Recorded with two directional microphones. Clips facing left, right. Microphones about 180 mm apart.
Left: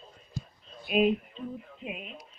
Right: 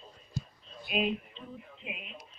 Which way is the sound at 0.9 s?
45° left (ahead or behind).